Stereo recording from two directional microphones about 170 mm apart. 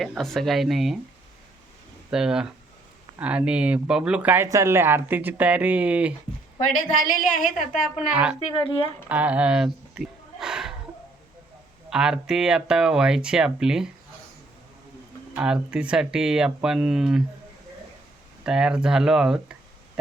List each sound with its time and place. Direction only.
0.0 s speech: centre (ahead or behind)
2.0 s speech: 5° right (ahead or behind)
6.6 s a woman's voice: 55° left (ahead or behind)
8.1 s speech: 5° right (ahead or behind)
8.4 s speech: 35° left (ahead or behind)
9.0 s speech: 10° right (ahead or behind)
9.9 s a sound: 5° right (ahead or behind)
11.9 s speech: 5° right (ahead or behind)
15.4 s speech: 5° right (ahead or behind)
18.4 s speech: 5° right (ahead or behind)